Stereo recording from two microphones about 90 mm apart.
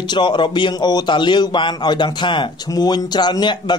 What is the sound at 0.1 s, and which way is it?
Speech, 55° left (ahead or behind).